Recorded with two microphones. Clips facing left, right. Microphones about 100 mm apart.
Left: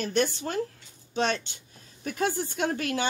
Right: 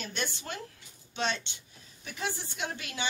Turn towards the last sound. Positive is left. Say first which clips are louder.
# left 9 dB
turn(degrees=45)  # may be behind; listen again after turning